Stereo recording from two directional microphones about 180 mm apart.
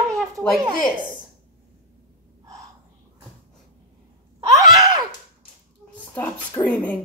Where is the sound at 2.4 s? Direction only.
20° right (ahead or behind).